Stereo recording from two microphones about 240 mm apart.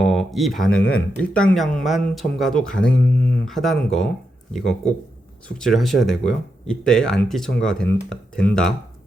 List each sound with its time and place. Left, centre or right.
0.0 s speech: centre